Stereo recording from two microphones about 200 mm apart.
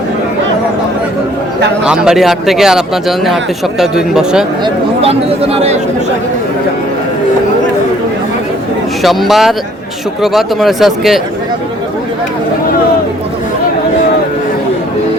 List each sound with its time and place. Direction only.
1.8 s a man's voice: 5° right (ahead or behind)
4.6 s speech: 30° right (ahead or behind)
9.0 s a man's voice: centre (ahead or behind)